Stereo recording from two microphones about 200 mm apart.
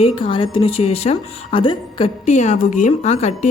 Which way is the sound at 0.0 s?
25° left (ahead or behind).